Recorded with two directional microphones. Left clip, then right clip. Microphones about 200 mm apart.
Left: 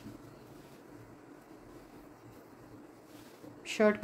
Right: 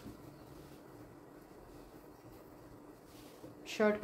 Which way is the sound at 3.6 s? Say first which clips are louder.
Left 4 dB; 20° left (ahead or behind).